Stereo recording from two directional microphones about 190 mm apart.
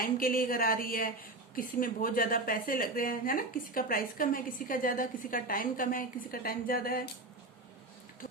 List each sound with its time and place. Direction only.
0.0 s a woman's voice: 50° left (ahead or behind)